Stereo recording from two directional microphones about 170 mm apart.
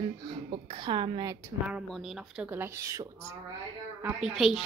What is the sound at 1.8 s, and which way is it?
A woman's voice, centre (ahead or behind).